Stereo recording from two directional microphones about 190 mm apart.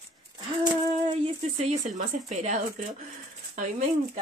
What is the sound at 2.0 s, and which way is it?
Speech, 40° right (ahead or behind).